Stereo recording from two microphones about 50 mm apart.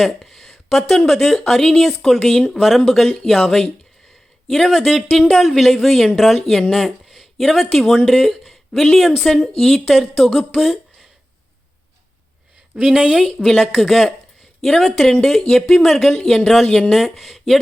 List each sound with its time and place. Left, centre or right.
0.0 s speech: centre
4.6 s speech: centre
8.3 s a sound: centre
9.2 s speech: centre
12.7 s speech: right
13.4 s speech: centre
16.6 s speech: left
16.9 s speech: centre